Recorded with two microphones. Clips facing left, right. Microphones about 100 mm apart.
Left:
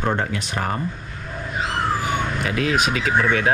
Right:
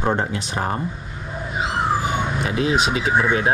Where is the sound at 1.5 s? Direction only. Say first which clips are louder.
Right 2 dB; 10° right (ahead or behind).